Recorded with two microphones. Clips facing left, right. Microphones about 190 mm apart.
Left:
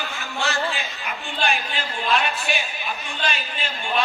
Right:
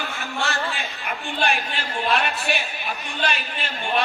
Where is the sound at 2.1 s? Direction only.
60° right (ahead or behind).